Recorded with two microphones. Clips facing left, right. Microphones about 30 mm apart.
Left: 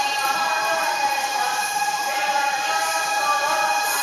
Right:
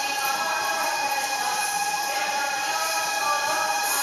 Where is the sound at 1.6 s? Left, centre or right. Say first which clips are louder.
Left 3 dB; centre.